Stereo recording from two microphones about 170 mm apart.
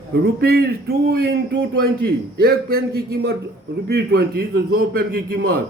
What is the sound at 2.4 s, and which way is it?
A man's voice, 65° right (ahead or behind).